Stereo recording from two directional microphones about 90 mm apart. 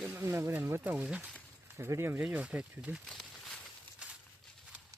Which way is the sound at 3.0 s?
5° left (ahead or behind).